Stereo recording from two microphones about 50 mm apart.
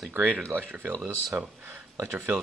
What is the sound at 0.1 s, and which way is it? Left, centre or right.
Speech, right.